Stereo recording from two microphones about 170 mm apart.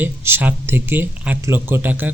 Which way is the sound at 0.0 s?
10° right (ahead or behind).